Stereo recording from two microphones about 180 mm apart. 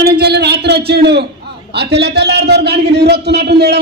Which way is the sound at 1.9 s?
70° right (ahead or behind).